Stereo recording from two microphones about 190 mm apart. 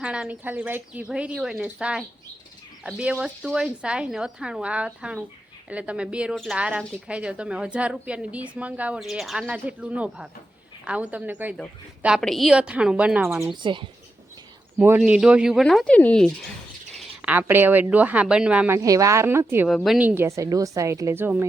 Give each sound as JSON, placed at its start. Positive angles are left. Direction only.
{"t": 0.0, "sound": "speech", "side_deg": -5}
{"t": 13.6, "sound": "speech", "side_deg": -25}
{"t": 14.8, "sound": "speech", "side_deg": -10}
{"t": 16.9, "sound": "speech", "side_deg": -10}
{"t": 19.6, "sound": "speech", "side_deg": 0}